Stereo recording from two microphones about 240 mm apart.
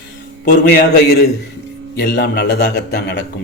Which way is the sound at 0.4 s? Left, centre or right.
Left.